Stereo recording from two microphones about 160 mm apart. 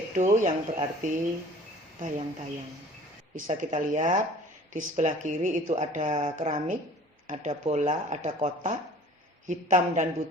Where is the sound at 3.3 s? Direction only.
55° right (ahead or behind).